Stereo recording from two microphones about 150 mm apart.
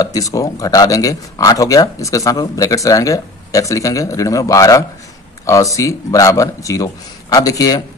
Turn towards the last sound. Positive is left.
turn(degrees=25)  # may be behind; listen again after turning